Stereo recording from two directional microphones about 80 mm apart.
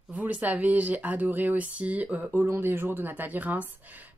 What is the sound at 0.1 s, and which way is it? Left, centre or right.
Speech, centre.